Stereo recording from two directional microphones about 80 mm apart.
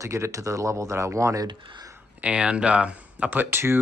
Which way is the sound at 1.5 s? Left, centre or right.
Right.